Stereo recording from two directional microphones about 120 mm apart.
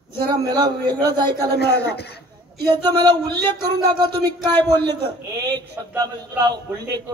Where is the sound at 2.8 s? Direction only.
35° right (ahead or behind).